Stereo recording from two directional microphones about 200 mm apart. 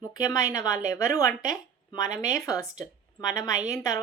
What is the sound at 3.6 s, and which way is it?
Speech, 15° left (ahead or behind).